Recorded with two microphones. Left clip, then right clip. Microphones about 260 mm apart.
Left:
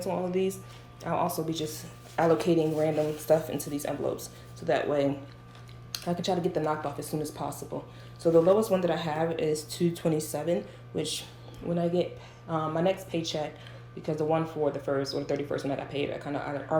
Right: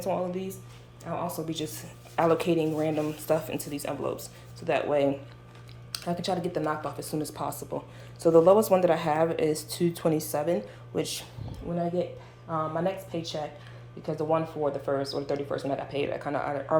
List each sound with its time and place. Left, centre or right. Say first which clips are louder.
0.0 s speech: left 1 dB; centre
12.5 s speech: left 1 dB; centre